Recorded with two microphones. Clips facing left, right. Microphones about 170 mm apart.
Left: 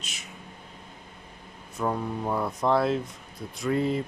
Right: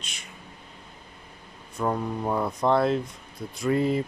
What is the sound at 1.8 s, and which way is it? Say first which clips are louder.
Speech: right 1 dB; centre (ahead or behind).